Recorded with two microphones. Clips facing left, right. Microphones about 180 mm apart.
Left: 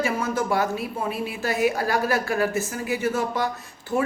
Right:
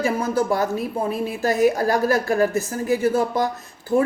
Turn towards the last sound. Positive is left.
turn(degrees=-40)  # may be behind; listen again after turning